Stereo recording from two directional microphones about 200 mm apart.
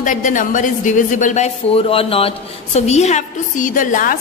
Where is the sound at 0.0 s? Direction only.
40° left (ahead or behind).